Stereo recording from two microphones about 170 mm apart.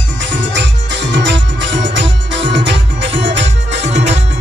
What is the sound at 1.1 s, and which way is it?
Music, 90° right.